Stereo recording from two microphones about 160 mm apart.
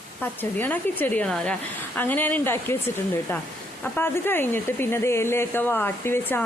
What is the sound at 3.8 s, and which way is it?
Speech, 15° left (ahead or behind).